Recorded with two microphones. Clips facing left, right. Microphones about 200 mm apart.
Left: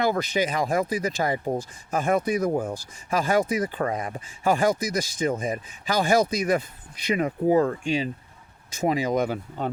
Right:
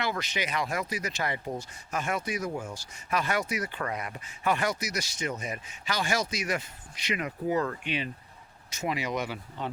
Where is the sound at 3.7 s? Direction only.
35° left (ahead or behind).